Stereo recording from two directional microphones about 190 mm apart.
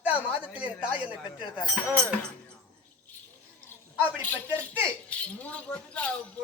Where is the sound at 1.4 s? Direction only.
25° left (ahead or behind).